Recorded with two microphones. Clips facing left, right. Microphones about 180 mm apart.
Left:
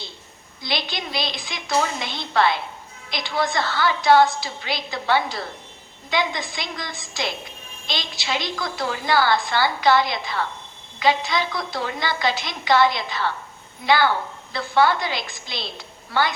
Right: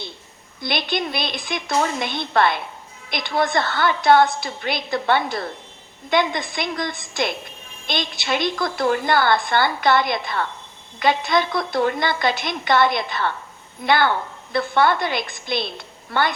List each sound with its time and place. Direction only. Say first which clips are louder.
0.6 s a woman's voice: right 4 dB; 55° right (ahead or behind)